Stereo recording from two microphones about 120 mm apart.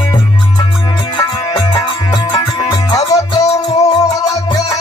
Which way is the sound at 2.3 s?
45° left (ahead or behind).